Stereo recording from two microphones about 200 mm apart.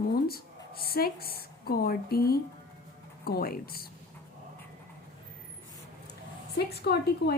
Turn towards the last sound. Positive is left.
turn(degrees=50)  # may be behind; listen again after turning